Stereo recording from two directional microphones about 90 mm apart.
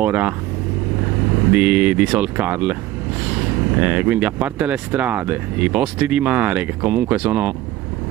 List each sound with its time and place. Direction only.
0.0 s speech: 15° right (ahead or behind)
1.5 s speech: 15° right (ahead or behind)